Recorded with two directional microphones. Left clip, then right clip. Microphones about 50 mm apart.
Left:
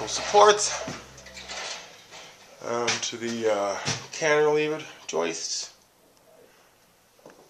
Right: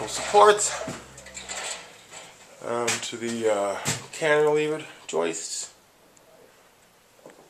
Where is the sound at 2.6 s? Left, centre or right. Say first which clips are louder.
Even; centre.